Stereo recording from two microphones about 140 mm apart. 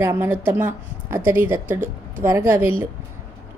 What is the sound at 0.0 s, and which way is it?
A woman's voice, 15° right (ahead or behind).